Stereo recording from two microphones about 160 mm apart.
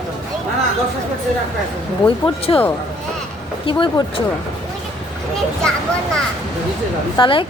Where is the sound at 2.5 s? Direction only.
30° left (ahead or behind).